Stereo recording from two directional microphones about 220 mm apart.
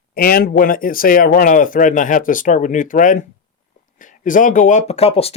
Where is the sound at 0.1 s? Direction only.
45° left (ahead or behind).